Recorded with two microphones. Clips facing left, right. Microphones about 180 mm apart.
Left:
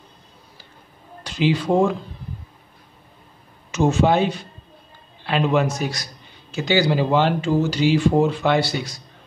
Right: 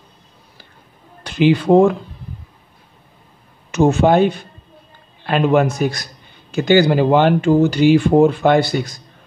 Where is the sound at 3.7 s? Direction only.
55° right (ahead or behind).